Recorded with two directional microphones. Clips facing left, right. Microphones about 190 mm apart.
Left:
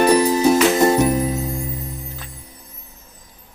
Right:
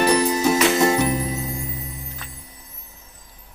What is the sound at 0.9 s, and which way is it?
Music, centre (ahead or behind).